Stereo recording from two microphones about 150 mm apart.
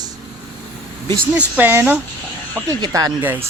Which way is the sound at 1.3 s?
10° right (ahead or behind).